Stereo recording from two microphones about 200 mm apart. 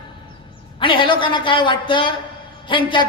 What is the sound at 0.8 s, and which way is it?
Speech, 25° left (ahead or behind).